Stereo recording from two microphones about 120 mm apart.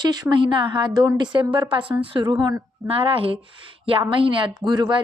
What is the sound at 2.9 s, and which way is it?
A woman's voice, 50° right (ahead or behind).